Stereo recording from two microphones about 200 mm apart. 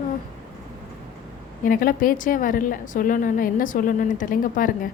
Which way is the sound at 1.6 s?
45° left (ahead or behind).